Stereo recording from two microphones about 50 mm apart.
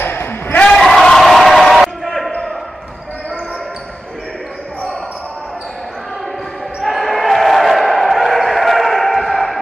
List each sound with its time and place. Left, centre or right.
0.0 s basketball bounce: left
0.7 s basketball bounce: centre
6.8 s basketball bounce: centre